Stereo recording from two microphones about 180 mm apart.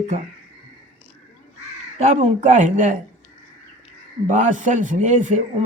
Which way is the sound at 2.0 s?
40° right (ahead or behind).